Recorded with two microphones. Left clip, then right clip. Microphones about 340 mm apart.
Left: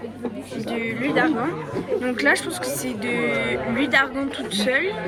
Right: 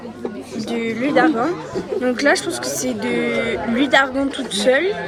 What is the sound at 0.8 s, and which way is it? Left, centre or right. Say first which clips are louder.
Speech: right 5 dB; centre.